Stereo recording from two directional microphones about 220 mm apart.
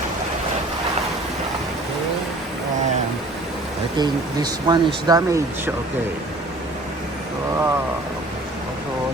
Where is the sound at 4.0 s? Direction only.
20° right (ahead or behind).